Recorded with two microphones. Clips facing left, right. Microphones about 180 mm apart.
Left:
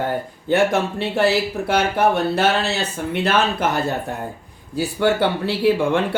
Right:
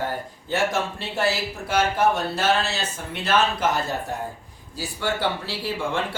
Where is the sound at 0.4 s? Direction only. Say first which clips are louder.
Left 6 dB; 60° left (ahead or behind).